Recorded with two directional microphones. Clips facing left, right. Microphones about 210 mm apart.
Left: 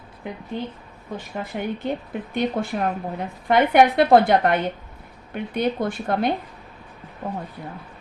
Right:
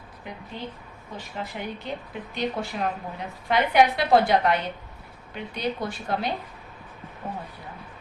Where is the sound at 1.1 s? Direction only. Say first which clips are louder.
Left 5 dB; 55° left (ahead or behind).